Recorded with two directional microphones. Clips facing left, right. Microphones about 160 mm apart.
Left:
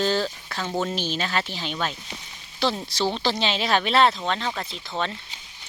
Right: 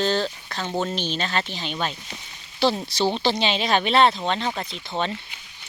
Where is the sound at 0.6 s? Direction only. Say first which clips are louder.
Right 1 dB; 10° right (ahead or behind).